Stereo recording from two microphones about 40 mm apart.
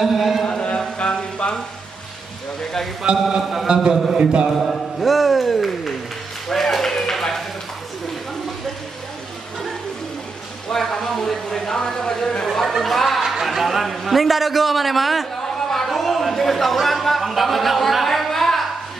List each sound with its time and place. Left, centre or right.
0.0 s a sound: centre
0.5 s chant: left
3.2 s music: centre
3.6 s a man's voice: centre
4.2 s a man's voice: right
4.5 s a man's voice: centre
6.5 s a sound: centre
10.7 s a sound: centre
12.4 s chatter: centre
12.8 s a man's voice: centre